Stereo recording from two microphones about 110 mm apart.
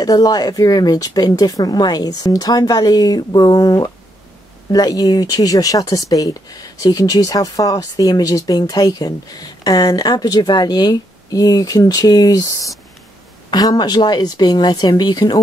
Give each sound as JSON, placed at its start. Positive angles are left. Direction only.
{"t": 0.0, "sound": "speech", "side_deg": 35}